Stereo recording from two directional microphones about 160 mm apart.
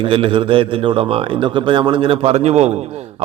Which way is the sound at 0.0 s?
35° right (ahead or behind).